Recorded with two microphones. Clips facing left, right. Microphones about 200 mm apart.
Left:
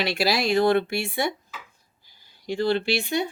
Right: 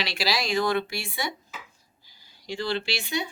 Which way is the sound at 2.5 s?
55° left (ahead or behind).